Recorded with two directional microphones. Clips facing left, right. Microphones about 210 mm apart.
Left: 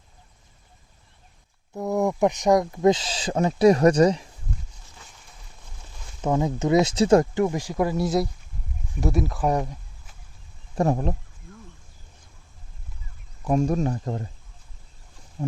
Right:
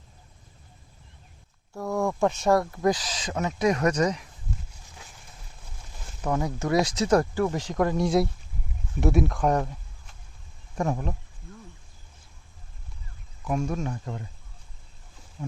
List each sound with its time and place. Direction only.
1.7 s speech: 20° left (ahead or behind)
6.2 s speech: 20° left (ahead or behind)
10.8 s speech: 35° left (ahead or behind)
13.4 s speech: 35° left (ahead or behind)
15.4 s a sound: 35° left (ahead or behind)